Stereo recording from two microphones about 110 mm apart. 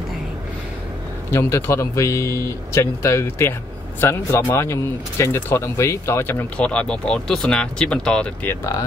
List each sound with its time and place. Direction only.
1.3 s speech: 25° left (ahead or behind)
6.6 s speech: 10° left (ahead or behind)
8.5 s speech: 30° left (ahead or behind)